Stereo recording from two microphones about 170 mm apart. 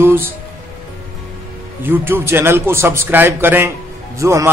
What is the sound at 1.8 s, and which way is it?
A man's voice, 10° right (ahead or behind).